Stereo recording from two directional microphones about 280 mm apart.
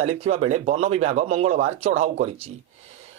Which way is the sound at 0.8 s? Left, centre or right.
Right.